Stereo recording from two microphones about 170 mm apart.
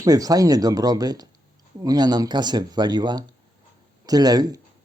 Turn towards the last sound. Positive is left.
turn(degrees=-20)  # may be behind; listen again after turning